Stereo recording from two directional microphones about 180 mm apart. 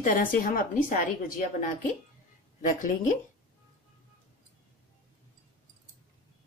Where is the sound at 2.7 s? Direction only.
45° left (ahead or behind).